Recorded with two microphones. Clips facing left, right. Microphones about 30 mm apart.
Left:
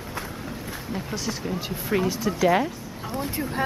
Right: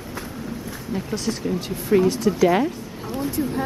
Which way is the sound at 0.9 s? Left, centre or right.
Centre.